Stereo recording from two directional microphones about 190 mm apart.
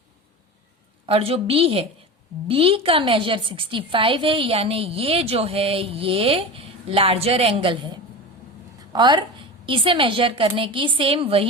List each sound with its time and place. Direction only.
1.0 s a woman's voice: 30° right (ahead or behind)
8.9 s a woman's voice: 25° right (ahead or behind)